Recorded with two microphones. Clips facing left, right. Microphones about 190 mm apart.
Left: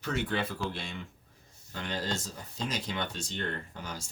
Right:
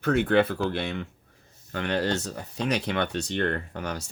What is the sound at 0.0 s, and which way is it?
Speech, 55° right (ahead or behind).